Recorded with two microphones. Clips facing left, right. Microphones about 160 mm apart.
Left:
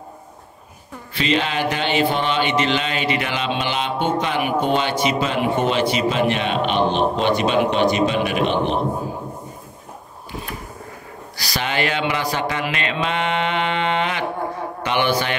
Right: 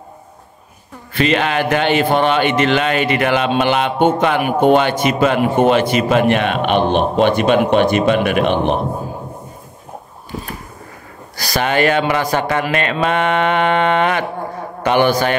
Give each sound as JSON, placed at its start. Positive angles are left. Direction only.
{"t": 1.1, "sound": "speech", "side_deg": -55}
{"t": 11.3, "sound": "speech", "side_deg": -45}